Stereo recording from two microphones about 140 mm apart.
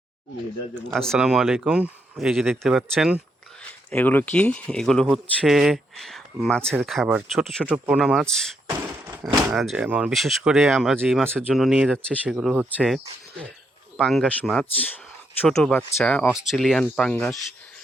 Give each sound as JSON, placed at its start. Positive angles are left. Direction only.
{"t": 0.9, "sound": "speech", "side_deg": 5}
{"t": 3.6, "sound": "speech", "side_deg": 10}
{"t": 11.1, "sound": "speech", "side_deg": -10}
{"t": 11.3, "sound": "speech", "side_deg": 0}